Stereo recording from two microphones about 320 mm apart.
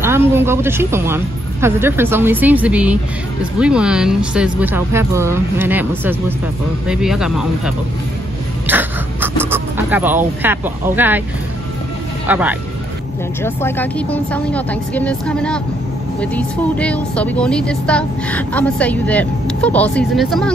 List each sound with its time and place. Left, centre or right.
0.0 s a woman's voice: centre
8.6 s a sound: centre
9.5 s speech: centre
12.3 s a woman's voice: centre
13.4 s a woman's voice: centre